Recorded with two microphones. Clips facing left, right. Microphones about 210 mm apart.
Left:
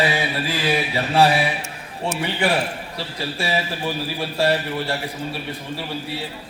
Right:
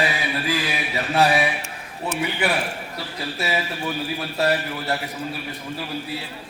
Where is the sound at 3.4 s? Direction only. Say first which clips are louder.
Left 1 dB; 30° left (ahead or behind).